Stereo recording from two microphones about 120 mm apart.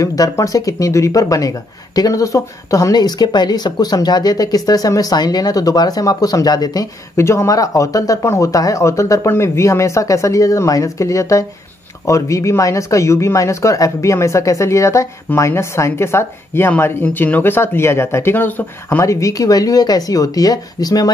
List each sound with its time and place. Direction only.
0.0 s speech: 30° left (ahead or behind)